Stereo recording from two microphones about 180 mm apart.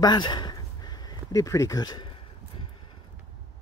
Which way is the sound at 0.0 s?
25° left (ahead or behind).